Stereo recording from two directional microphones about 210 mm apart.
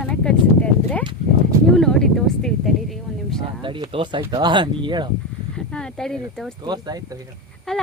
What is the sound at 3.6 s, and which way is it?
Speech, 25° right (ahead or behind).